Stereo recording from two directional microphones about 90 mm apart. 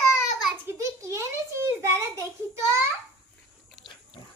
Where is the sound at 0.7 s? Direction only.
35° right (ahead or behind).